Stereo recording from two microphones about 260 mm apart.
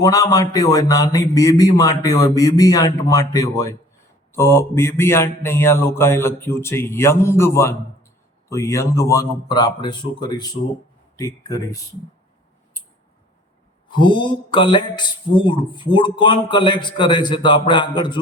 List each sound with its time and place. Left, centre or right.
0.0 s speech: centre
13.8 s speech: centre